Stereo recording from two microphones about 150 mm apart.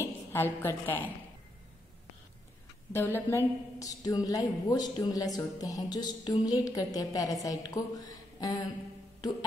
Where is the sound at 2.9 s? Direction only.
15° left (ahead or behind).